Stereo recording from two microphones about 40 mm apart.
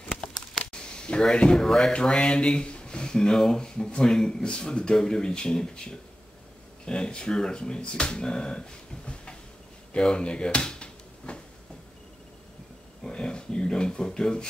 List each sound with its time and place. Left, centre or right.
0.7 s speech: left
2.0 s speech: left
9.9 s a sound: left
13.0 s speech: left